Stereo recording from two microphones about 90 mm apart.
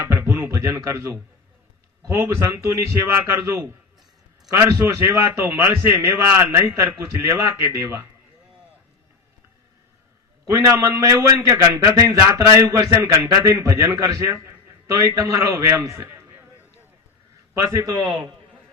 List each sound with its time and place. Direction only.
0.0 s a man's voice: 30° right (ahead or behind)
10.4 s a man's voice: 35° right (ahead or behind)
17.5 s a man's voice: 35° right (ahead or behind)